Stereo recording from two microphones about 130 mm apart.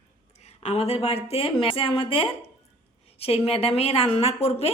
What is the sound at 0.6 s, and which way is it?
Speech, 50° left (ahead or behind).